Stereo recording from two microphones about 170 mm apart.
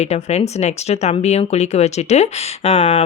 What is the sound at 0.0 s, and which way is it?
Speech, 40° left (ahead or behind).